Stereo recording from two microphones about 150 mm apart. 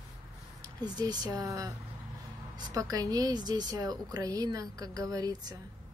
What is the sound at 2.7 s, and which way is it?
Speech, 25° right (ahead or behind).